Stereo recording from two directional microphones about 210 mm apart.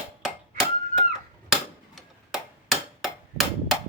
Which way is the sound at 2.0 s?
Centre (ahead or behind).